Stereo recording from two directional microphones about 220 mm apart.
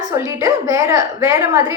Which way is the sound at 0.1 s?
10° right (ahead or behind).